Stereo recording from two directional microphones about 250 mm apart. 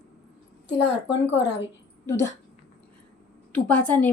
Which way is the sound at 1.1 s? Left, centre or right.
Left.